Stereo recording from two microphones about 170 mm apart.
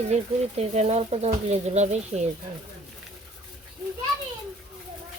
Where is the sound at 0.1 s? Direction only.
40° right (ahead or behind).